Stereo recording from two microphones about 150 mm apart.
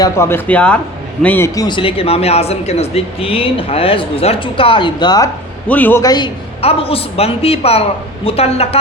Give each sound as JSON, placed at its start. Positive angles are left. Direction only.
{"t": 0.0, "sound": "speech", "side_deg": 15}
{"t": 1.5, "sound": "speech", "side_deg": 30}
{"t": 5.6, "sound": "speech", "side_deg": 10}
{"t": 6.0, "sound": "a man's voice", "side_deg": 25}
{"t": 6.6, "sound": "speech", "side_deg": 40}